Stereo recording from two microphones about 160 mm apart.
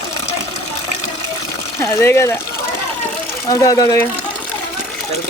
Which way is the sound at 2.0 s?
15° left (ahead or behind).